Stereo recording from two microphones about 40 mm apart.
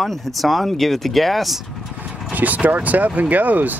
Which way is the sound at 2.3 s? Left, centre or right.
Right.